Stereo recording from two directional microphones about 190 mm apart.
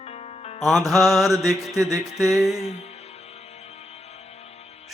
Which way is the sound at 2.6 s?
35° left (ahead or behind).